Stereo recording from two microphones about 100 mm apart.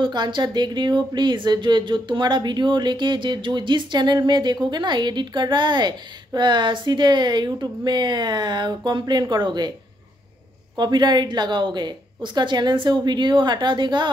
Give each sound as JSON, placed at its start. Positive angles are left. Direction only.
{"t": 0.0, "sound": "speech", "side_deg": -50}
{"t": 10.8, "sound": "speech", "side_deg": -45}